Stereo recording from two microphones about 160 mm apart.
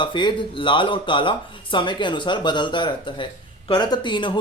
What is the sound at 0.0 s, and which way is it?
Speech, 30° left (ahead or behind).